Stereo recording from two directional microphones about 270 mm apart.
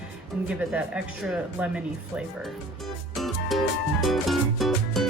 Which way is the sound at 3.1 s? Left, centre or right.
Centre.